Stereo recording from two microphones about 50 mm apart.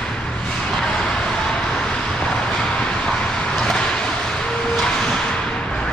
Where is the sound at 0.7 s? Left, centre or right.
Centre.